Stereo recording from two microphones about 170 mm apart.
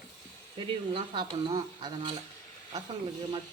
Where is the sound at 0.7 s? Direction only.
30° right (ahead or behind).